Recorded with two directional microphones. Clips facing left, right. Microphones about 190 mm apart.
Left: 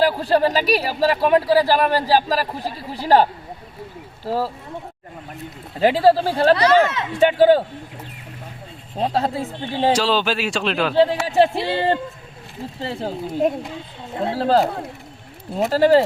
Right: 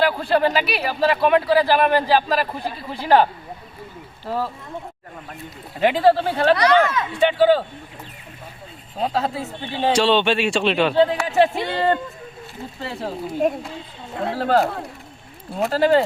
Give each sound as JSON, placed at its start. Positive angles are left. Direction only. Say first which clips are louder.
{"t": 0.0, "sound": "speech", "louder": "left 1 dB", "side_deg": 35}
{"t": 4.3, "sound": "speech", "louder": "left 3 dB", "side_deg": 35}
{"t": 5.8, "sound": "speech", "louder": "left 1 dB", "side_deg": 35}
{"t": 7.2, "sound": "a man's voice", "louder": "left 3 dB", "side_deg": 45}
{"t": 9.0, "sound": "speech", "louder": "left 2 dB", "side_deg": 35}
{"t": 9.9, "sound": "a man's voice", "louder": "right 5 dB", "side_deg": 0}
{"t": 10.9, "sound": "speech", "louder": "left 5 dB", "side_deg": 30}